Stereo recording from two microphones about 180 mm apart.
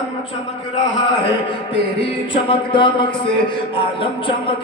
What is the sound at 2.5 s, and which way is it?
A man's voice, 25° left (ahead or behind).